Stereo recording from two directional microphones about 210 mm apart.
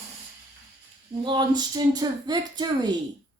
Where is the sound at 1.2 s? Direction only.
20° right (ahead or behind).